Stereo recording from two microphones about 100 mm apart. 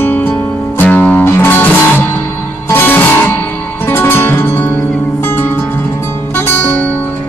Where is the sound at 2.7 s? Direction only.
20° left (ahead or behind).